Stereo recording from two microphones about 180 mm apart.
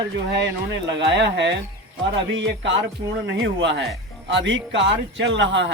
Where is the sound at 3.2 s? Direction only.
80° right.